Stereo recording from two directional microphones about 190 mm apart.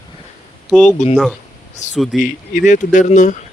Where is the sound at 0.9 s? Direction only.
35° left (ahead or behind).